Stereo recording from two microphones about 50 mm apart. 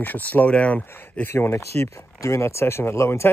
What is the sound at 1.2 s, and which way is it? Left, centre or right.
Speech, left.